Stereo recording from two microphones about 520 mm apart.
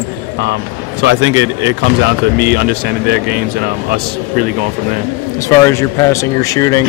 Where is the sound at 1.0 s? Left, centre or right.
Right.